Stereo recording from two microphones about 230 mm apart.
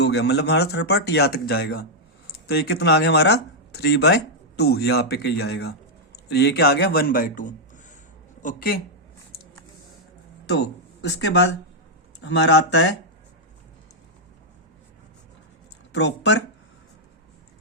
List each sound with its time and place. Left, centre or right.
0.0 s a man's voice: left
10.5 s speech: left
15.9 s speech: left